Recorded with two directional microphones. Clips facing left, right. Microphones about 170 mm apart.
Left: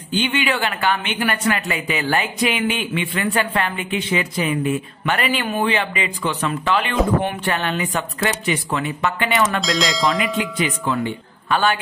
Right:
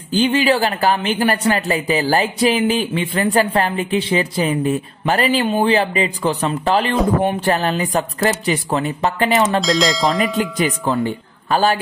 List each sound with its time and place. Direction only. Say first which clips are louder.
0.1 s speech: right 6 dB; 35° right (ahead or behind)
9.6 s bell: right 4 dB; centre (ahead or behind)
11.1 s a man's voice: right 2 dB; 35° right (ahead or behind)